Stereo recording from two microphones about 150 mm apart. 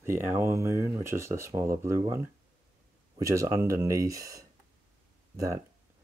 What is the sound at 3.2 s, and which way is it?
Speech, 20° right (ahead or behind).